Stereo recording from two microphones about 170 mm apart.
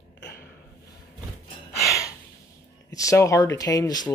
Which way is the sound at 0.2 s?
70° left (ahead or behind).